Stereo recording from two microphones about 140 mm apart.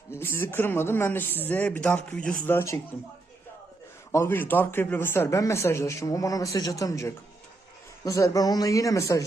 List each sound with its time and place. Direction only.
0.1 s speech: 15° left (ahead or behind)
4.1 s speech: 15° left (ahead or behind)